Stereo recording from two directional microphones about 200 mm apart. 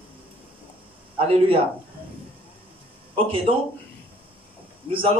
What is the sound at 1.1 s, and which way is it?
Speech, 25° right (ahead or behind).